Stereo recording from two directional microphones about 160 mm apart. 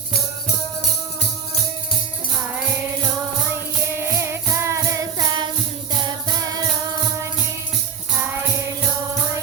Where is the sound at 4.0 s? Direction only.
15° right (ahead or behind).